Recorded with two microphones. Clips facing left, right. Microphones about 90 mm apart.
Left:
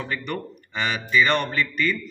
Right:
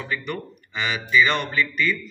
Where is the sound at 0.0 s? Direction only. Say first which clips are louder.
Even; 40° left (ahead or behind).